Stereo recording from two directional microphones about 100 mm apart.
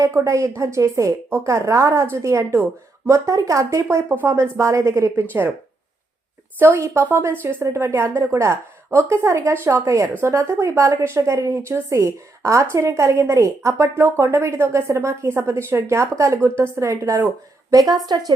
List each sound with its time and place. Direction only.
0.0 s a woman's voice: 30° right (ahead or behind)
4.1 s a woman's voice: 20° right (ahead or behind)
4.4 s a woman's voice: 30° right (ahead or behind)
6.6 s a woman's voice: 25° right (ahead or behind); by 18.3 s 40° right (ahead or behind)